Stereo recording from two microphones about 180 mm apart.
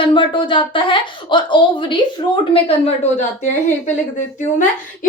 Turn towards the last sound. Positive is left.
turn(degrees=45)  # may be behind; listen again after turning